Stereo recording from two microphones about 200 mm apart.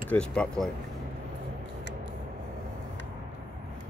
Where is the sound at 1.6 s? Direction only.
60° right (ahead or behind).